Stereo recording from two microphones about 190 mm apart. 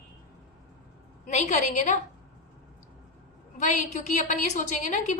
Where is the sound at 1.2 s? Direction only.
40° left (ahead or behind).